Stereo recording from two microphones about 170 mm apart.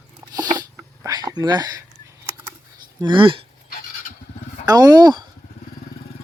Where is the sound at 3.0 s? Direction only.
30° right (ahead or behind).